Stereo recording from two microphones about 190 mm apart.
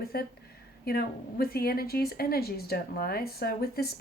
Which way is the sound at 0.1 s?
55° left (ahead or behind).